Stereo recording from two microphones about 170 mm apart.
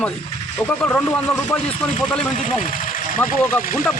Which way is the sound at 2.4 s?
50° left (ahead or behind).